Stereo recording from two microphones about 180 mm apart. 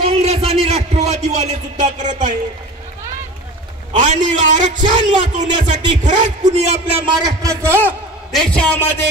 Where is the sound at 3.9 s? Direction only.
45° right (ahead or behind).